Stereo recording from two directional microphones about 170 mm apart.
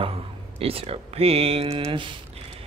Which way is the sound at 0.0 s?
35° right (ahead or behind).